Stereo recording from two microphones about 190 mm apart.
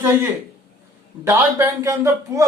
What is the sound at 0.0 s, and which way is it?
A man's voice, 10° right (ahead or behind).